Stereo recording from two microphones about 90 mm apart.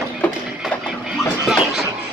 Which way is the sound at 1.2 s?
5° right (ahead or behind).